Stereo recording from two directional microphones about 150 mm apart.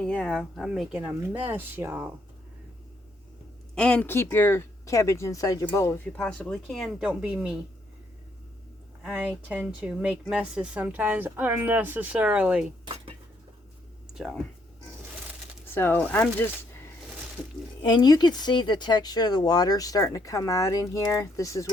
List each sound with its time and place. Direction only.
0.0 s a woman's voice: 5° left (ahead or behind); by 2.0 s 15° right (ahead or behind)
3.8 s speech: 5° left (ahead or behind)
6.1 s speech: 5° left (ahead or behind)
9.0 s a woman's voice: 10° right (ahead or behind)
12.8 s cutlery: 35° right (ahead or behind)
14.1 s speech: centre (ahead or behind)
15.7 s speech: 15° left (ahead or behind)
17.8 s speech: 30° left (ahead or behind)